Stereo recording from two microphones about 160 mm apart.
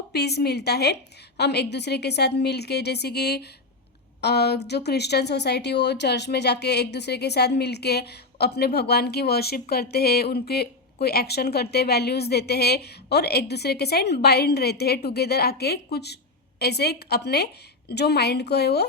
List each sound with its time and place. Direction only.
0.1 s speech: 90° left